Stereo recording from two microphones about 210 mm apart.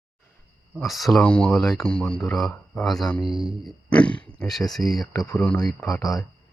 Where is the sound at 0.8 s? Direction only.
Centre (ahead or behind).